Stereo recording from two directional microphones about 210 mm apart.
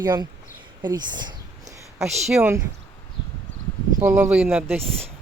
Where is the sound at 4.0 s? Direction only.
10° right (ahead or behind).